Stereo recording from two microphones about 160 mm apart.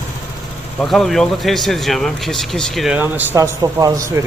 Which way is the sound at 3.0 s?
15° right (ahead or behind).